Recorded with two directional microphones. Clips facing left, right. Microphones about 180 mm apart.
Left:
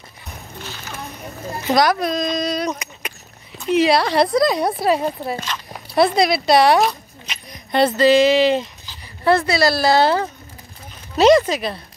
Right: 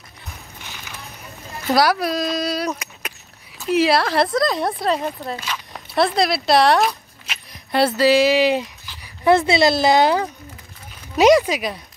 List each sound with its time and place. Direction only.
1.8 s speech: 5° right (ahead or behind)
9.0 s a sound: 15° right (ahead or behind)
9.5 s a woman's voice: 20° right (ahead or behind)